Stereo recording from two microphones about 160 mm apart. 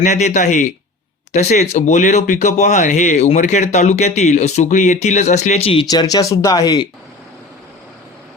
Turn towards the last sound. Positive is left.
turn(degrees=25)  # may be behind; listen again after turning